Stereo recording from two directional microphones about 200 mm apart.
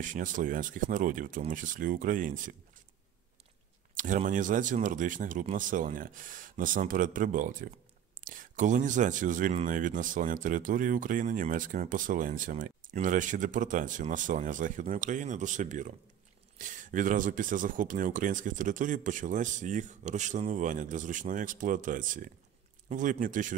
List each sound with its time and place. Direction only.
0.0 s speech: 40° right (ahead or behind)
3.9 s speech: 40° right (ahead or behind)